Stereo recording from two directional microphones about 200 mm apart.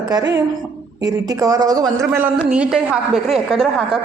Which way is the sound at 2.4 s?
5° right (ahead or behind).